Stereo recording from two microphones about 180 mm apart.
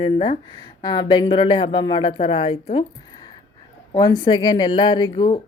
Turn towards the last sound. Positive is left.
turn(degrees=25)  # may be behind; listen again after turning